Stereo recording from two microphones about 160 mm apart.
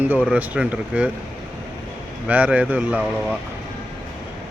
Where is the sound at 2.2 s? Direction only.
10° right (ahead or behind).